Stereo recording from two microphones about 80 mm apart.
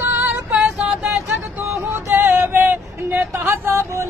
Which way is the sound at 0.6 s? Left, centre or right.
Centre.